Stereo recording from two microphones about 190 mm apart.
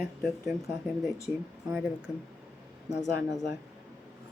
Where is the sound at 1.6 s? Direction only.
5° right (ahead or behind).